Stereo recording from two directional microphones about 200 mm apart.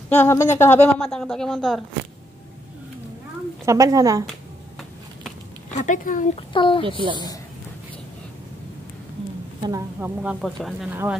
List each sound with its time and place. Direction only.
0.1 s a woman's voice: 15° left (ahead or behind)
3.6 s speech: 15° right (ahead or behind)
5.7 s a woman's voice: 40° left (ahead or behind)
6.5 s speech: 25° left (ahead or behind)
6.8 s a woman's voice: 25° right (ahead or behind)
9.6 s speech: 15° right (ahead or behind); by 11.0 s centre (ahead or behind)